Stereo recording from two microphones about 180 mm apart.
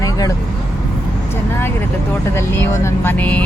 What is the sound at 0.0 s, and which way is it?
Vehicle, 20° left (ahead or behind).